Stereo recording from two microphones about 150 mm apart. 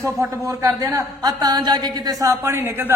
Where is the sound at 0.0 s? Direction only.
20° right (ahead or behind).